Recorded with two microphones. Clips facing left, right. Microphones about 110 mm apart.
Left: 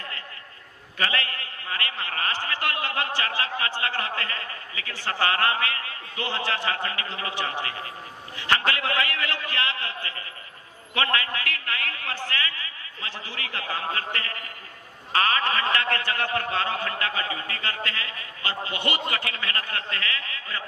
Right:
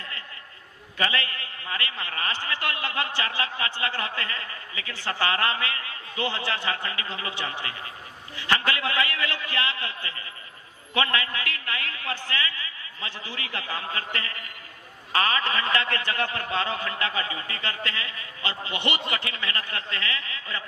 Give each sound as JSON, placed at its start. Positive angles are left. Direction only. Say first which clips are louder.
{"t": 0.9, "sound": "a sound", "louder": "even", "side_deg": -20}
{"t": 2.0, "sound": "a man's voice", "louder": "left 3 dB", "side_deg": -20}
{"t": 8.7, "sound": "a man's voice", "louder": "even", "side_deg": -20}
{"t": 11.3, "sound": "a sound", "louder": "left 1 dB", "side_deg": -20}
{"t": 14.1, "sound": "a man's voice", "louder": "left 1 dB", "side_deg": -20}
{"t": 18.9, "sound": "speech", "louder": "left 1 dB", "side_deg": 30}
{"t": 19.2, "sound": "a man's voice", "louder": "left 1 dB", "side_deg": -25}